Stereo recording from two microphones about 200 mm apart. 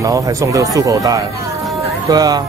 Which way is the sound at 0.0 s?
15° right (ahead or behind).